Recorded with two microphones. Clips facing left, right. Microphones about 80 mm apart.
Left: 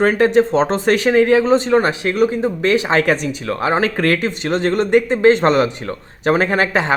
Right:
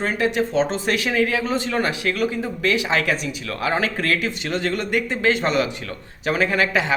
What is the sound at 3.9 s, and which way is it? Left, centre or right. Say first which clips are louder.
A man's voice: left 6 dB; left.